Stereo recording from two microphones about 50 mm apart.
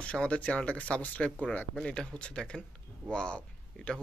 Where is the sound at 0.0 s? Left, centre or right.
Left.